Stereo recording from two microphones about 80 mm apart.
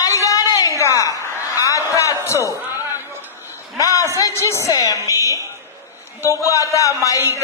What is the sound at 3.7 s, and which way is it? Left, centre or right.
A man's voice, left.